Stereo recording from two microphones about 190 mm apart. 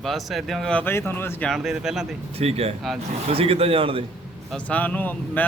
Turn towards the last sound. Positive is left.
turn(degrees=10)  # may be behind; listen again after turning